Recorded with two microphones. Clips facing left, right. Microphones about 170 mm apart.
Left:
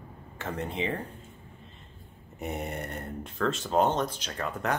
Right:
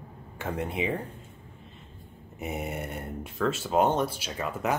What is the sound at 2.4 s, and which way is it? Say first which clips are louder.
Speech: right 1 dB; centre (ahead or behind).